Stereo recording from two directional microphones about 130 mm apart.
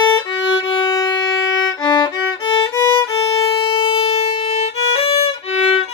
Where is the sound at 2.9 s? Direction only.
25° left (ahead or behind).